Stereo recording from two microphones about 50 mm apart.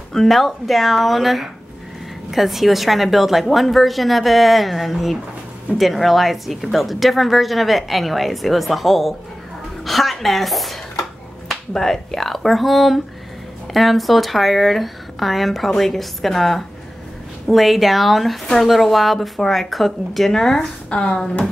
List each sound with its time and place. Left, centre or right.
0.1 s speech: centre
20.9 s speech: left